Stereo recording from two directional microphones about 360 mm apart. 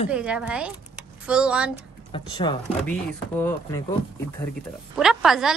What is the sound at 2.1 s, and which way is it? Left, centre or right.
Speech, centre.